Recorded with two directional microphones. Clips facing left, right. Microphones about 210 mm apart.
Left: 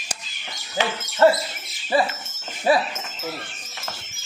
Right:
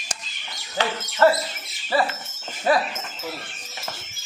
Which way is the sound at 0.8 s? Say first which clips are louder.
Left 1 dB; 25° left (ahead or behind).